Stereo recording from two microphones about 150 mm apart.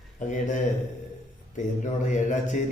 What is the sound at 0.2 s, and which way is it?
Speech, 55° left (ahead or behind).